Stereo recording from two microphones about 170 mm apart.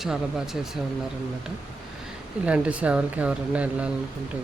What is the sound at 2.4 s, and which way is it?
Speech, 5° right (ahead or behind).